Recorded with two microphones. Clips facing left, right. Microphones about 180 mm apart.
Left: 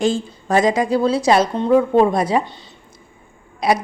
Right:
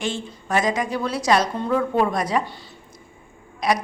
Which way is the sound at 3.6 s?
30° left (ahead or behind).